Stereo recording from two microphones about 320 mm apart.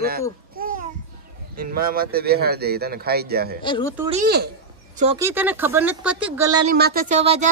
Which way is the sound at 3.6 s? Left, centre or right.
Centre.